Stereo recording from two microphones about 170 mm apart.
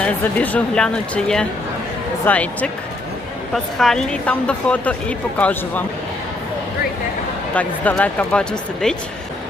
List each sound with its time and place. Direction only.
0.0 s a woman's voice: 10° left (ahead or behind)
7.5 s speech: 10° left (ahead or behind)